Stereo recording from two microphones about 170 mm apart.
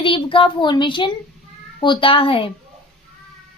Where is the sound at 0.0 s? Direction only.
30° left (ahead or behind).